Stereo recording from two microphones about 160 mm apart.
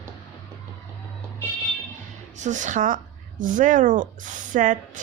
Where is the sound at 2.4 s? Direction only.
50° right (ahead or behind).